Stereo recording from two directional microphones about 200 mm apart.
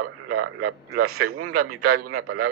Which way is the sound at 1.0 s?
90° right.